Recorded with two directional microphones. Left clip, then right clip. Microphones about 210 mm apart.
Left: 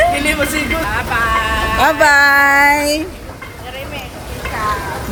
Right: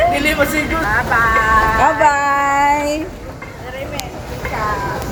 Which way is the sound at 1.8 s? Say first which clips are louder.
Left 3 dB; 45° left (ahead or behind).